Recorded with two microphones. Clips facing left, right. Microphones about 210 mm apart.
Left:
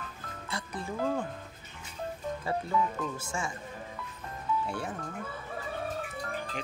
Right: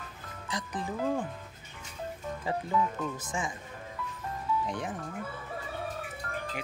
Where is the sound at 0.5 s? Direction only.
15° right (ahead or behind).